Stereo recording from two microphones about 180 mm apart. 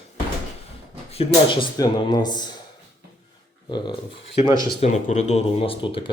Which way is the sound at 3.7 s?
25° left (ahead or behind).